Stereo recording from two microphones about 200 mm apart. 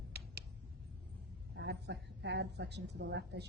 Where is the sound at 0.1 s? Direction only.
55° right (ahead or behind).